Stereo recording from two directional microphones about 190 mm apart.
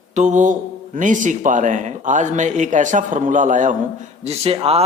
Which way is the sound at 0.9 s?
40° right (ahead or behind).